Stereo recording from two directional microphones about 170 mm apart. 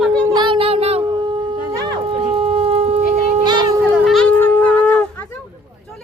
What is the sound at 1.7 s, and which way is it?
Shofar, 25° right (ahead or behind).